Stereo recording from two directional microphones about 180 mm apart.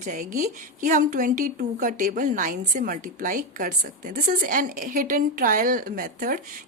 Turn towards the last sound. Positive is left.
turn(degrees=-50)  # may be behind; listen again after turning